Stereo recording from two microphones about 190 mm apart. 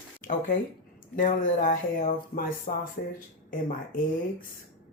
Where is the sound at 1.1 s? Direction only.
45° left (ahead or behind).